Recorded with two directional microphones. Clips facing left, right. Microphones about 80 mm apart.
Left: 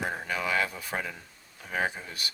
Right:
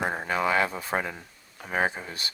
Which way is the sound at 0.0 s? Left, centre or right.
Right.